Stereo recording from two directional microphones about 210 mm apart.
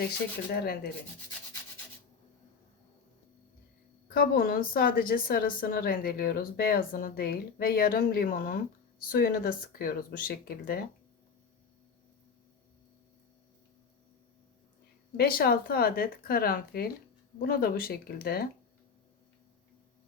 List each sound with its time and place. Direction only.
0.5 s a woman's voice: 50° left (ahead or behind)
4.1 s a woman's voice: 45° left (ahead or behind)
15.1 s a woman's voice: 45° left (ahead or behind)